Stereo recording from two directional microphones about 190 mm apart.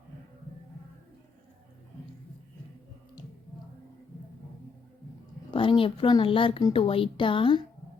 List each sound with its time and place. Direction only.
5.5 s speech: 25° left (ahead or behind)